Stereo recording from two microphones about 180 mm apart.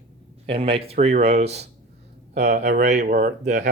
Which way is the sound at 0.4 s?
30° right (ahead or behind).